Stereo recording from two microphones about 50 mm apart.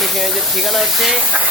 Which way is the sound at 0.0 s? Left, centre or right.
Centre.